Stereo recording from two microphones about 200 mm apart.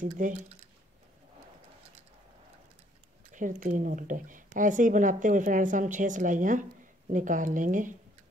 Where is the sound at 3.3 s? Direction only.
40° right (ahead or behind).